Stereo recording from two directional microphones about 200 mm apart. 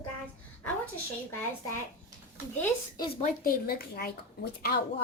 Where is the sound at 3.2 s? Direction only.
45° left (ahead or behind).